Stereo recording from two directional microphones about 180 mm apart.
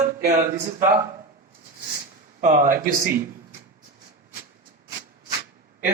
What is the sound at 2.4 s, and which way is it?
Speech, 50° right (ahead or behind).